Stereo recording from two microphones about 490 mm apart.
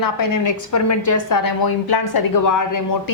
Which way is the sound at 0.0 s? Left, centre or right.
Left.